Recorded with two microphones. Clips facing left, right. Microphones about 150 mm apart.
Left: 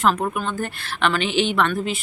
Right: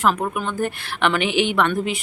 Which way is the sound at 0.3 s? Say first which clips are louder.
Right 2 dB; 15° right (ahead or behind).